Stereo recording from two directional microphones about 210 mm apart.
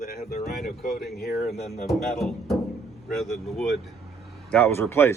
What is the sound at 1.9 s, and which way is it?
Speech, centre (ahead or behind).